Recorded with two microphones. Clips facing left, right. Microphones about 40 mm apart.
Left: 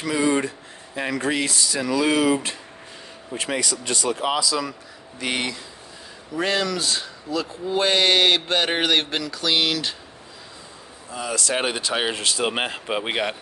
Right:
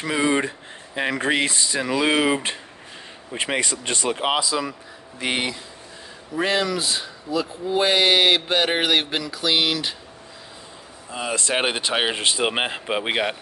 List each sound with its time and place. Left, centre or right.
0.0 s speech: right
5.2 s speech: centre
11.1 s speech: right; by 13.4 s centre